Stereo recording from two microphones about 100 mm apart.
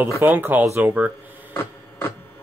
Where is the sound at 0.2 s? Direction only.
20° right (ahead or behind).